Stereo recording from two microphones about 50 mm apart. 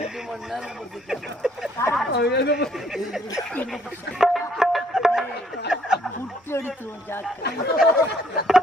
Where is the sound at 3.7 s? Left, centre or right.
Centre.